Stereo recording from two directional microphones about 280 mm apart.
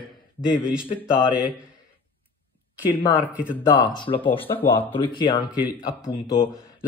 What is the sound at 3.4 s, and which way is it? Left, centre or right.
Speech, centre.